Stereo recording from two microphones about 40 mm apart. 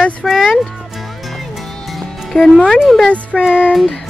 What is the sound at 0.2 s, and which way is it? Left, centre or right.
Music, centre.